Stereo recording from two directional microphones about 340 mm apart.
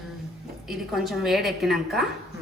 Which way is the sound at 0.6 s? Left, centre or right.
Centre.